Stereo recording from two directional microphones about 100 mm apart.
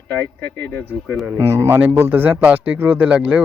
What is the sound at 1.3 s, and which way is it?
Speech, 25° right (ahead or behind).